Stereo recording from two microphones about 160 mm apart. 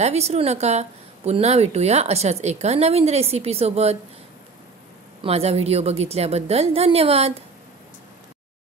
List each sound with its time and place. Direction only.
0.0 s a woman's voice: 45° right (ahead or behind)
5.2 s a woman's voice: 40° right (ahead or behind)